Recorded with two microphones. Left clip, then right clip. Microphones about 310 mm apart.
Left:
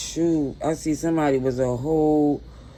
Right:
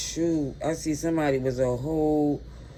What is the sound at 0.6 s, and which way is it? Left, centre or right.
Speech, centre.